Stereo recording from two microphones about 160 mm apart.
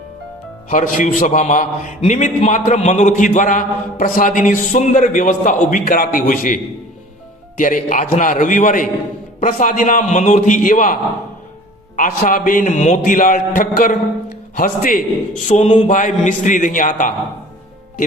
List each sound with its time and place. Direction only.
0.7 s a man's voice: 55° left (ahead or behind)
11.9 s a man's voice: 50° left (ahead or behind)
15.4 s a man's voice: 45° left (ahead or behind)